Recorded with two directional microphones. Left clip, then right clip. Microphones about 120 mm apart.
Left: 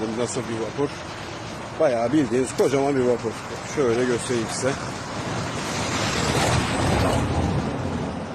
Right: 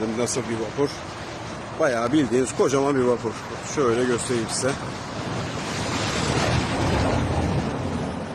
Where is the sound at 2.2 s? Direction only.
20° right (ahead or behind).